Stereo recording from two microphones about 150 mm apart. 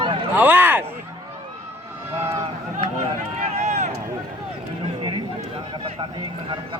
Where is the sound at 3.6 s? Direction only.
50° right (ahead or behind).